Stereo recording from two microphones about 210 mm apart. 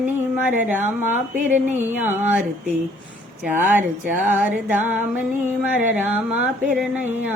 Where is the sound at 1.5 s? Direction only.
35° right (ahead or behind).